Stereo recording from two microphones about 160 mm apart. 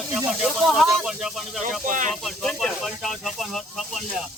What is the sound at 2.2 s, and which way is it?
Speech, centre (ahead or behind).